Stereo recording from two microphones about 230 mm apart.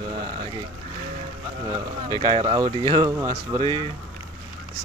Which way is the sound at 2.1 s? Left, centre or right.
Centre.